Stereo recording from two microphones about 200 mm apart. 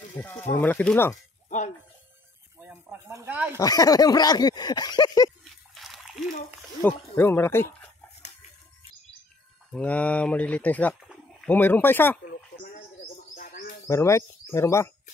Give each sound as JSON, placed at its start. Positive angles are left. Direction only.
{"t": 0.2, "sound": "speech", "side_deg": 10}
{"t": 2.6, "sound": "speech", "side_deg": -10}
{"t": 3.5, "sound": "a sound", "side_deg": 20}
{"t": 5.4, "sound": "splash", "side_deg": 0}
{"t": 6.8, "sound": "speech", "side_deg": 10}
{"t": 9.7, "sound": "speech", "side_deg": 5}
{"t": 12.3, "sound": "a sound", "side_deg": 45}
{"t": 13.4, "sound": "bird", "side_deg": 45}
{"t": 13.8, "sound": "speech", "side_deg": 15}